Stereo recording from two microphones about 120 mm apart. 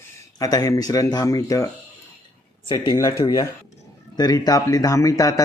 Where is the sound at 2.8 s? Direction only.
30° left (ahead or behind).